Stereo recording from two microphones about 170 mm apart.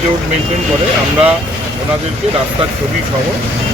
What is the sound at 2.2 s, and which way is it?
Speech, 40° right (ahead or behind).